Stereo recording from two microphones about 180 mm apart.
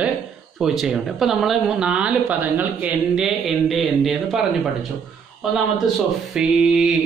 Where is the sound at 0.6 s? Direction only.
5° right (ahead or behind).